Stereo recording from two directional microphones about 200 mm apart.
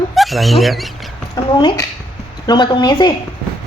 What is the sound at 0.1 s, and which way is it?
Speech, centre (ahead or behind).